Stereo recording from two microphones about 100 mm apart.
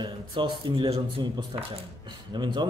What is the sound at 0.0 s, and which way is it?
Speech, 55° right (ahead or behind).